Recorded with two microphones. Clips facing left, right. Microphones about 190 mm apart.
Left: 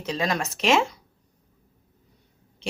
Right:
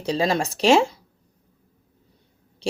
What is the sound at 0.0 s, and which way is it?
Speech, 30° right (ahead or behind).